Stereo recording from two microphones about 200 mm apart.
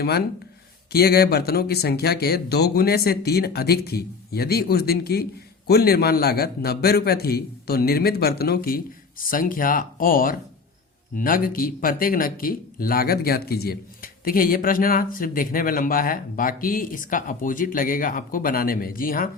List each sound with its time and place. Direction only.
0.9 s speech: 50° left (ahead or behind)